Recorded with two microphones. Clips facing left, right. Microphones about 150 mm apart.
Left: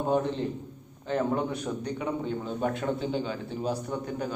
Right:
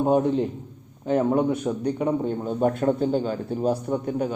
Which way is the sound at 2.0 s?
50° right (ahead or behind).